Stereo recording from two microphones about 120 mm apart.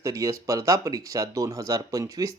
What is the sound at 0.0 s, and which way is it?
Speech, 30° right (ahead or behind).